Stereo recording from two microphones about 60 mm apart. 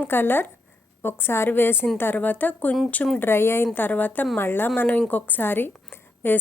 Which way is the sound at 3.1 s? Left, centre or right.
Left.